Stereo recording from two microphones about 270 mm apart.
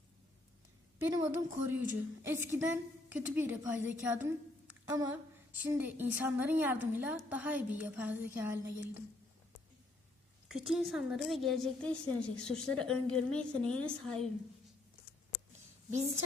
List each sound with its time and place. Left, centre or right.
1.0 s a woman's voice: centre
4.3 s a sound: centre
5.5 s a woman's voice: centre
10.5 s a woman's voice: centre
15.9 s a woman's voice: right